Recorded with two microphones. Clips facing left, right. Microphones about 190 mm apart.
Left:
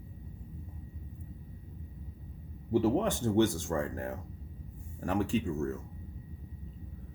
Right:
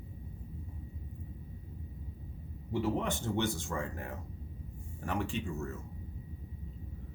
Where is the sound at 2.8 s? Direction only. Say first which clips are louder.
Left 2 dB; 40° left (ahead or behind).